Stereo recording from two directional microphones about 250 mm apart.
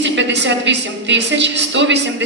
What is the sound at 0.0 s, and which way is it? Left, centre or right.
A man's voice, right.